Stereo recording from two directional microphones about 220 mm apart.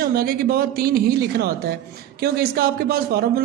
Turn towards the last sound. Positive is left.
turn(degrees=-45)  # may be behind; listen again after turning